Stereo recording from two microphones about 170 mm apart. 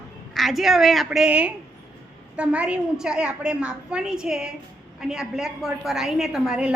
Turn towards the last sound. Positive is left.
turn(degrees=-5)  # may be behind; listen again after turning